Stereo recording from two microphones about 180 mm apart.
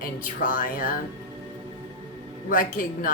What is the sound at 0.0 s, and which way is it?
Speech, 50° left (ahead or behind).